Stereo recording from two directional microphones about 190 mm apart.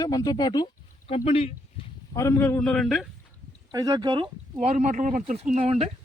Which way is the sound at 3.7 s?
20° right (ahead or behind).